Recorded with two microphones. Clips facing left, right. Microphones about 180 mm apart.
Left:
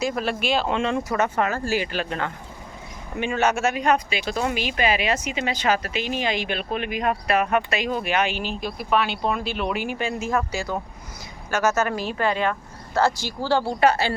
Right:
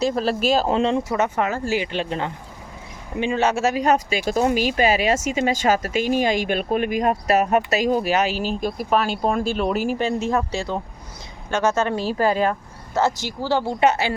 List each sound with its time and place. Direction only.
0.0 s speech: 35° right (ahead or behind)
12.9 s speech: 20° right (ahead or behind)